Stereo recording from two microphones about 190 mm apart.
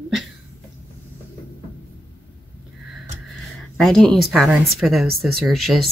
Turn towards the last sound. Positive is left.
turn(degrees=0)  # may be behind; listen again after turning